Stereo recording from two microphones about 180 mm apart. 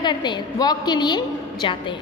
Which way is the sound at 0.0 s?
25° left (ahead or behind).